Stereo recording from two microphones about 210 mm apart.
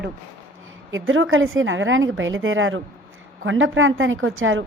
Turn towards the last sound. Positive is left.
turn(degrees=-70)  # may be behind; listen again after turning